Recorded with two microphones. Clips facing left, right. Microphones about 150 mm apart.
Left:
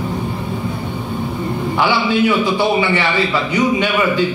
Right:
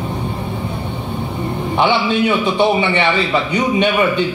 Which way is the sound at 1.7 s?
20° right (ahead or behind).